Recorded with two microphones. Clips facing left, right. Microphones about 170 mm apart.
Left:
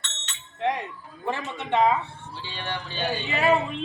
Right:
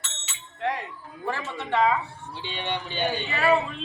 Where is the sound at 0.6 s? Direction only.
20° left (ahead or behind).